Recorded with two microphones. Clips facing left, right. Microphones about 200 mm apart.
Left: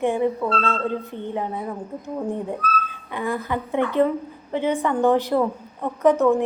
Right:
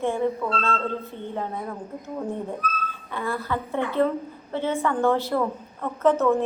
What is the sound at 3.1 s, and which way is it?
A child's voice, 15° left (ahead or behind).